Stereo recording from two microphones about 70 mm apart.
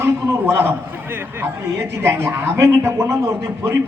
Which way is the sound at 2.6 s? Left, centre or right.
Right.